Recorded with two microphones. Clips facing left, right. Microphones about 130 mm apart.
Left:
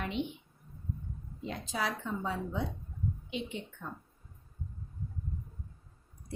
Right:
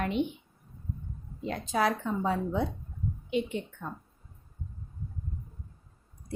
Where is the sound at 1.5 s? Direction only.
55° right (ahead or behind).